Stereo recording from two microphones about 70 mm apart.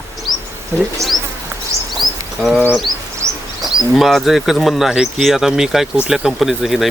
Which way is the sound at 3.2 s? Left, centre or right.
Right.